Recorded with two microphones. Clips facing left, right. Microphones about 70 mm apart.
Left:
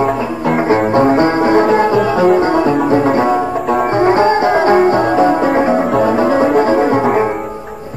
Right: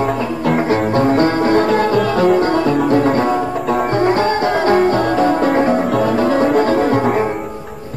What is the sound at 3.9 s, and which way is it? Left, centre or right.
Music, left.